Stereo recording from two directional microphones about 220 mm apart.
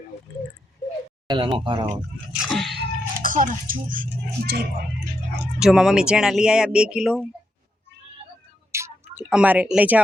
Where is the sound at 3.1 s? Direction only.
40° right (ahead or behind).